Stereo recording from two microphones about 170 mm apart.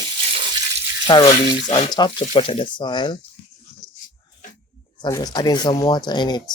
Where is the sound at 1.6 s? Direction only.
35° left (ahead or behind).